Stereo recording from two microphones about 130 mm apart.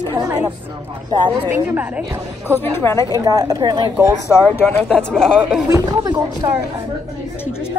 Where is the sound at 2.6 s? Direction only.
15° left (ahead or behind).